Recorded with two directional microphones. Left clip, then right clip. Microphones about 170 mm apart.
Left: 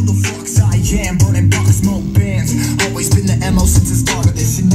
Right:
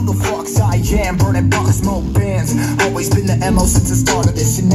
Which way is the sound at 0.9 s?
5° left (ahead or behind).